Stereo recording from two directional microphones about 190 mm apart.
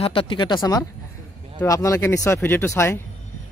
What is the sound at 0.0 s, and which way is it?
A woman's voice, 30° left (ahead or behind).